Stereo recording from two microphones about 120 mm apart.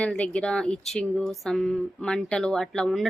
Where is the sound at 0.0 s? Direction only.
10° left (ahead or behind).